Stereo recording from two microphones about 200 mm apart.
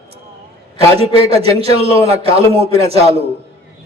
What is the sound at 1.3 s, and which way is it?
A man's voice, 30° right (ahead or behind).